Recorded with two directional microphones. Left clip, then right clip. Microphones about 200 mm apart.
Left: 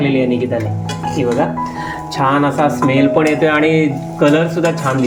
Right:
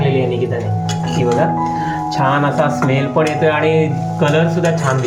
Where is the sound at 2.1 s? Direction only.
15° left (ahead or behind).